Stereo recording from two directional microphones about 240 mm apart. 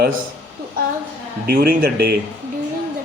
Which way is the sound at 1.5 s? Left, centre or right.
Right.